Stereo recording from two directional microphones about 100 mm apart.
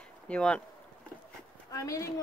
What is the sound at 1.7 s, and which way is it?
Speech, 35° left (ahead or behind).